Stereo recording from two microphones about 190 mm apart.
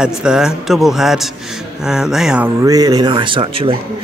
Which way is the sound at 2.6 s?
20° right (ahead or behind).